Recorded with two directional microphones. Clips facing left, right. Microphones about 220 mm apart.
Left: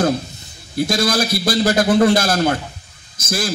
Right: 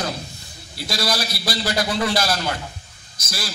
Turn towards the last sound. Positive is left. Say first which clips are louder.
# left 9 dB
turn(degrees=50)  # may be behind; listen again after turning